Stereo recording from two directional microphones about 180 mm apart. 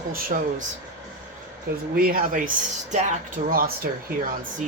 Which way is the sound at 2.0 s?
55° right (ahead or behind).